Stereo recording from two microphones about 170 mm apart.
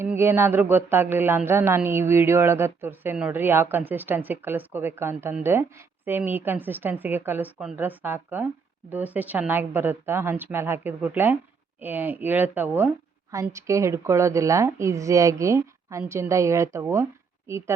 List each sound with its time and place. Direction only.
0.0 s speech: 15° right (ahead or behind)